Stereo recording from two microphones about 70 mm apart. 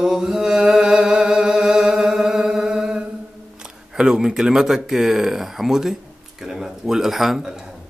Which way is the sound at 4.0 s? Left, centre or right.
Centre.